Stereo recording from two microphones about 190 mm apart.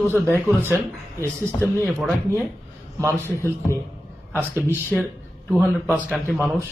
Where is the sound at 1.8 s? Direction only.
Centre (ahead or behind).